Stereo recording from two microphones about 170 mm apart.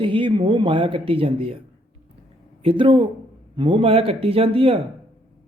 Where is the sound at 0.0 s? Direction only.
30° right (ahead or behind).